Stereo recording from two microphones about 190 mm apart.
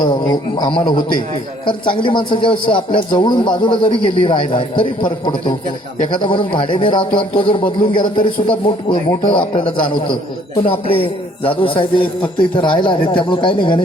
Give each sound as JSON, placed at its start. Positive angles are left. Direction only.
{"t": 0.0, "sound": "a man's voice", "side_deg": 25}